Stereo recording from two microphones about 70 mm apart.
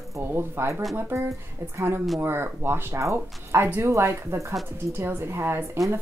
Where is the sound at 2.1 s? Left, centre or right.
Right.